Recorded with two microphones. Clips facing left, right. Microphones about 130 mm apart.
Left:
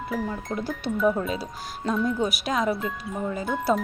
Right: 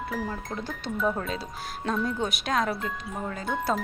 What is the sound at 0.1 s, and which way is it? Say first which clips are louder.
Speech: left 6 dB; centre (ahead or behind).